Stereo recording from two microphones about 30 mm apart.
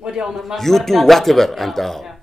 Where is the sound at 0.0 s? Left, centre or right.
Centre.